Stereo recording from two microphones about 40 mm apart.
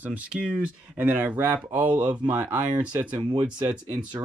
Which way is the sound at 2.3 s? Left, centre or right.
Right.